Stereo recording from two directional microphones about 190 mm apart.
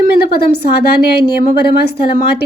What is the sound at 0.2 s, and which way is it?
Speech, 55° left (ahead or behind).